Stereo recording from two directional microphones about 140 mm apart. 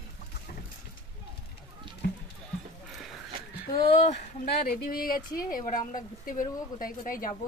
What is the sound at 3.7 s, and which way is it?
Speech, 40° left (ahead or behind).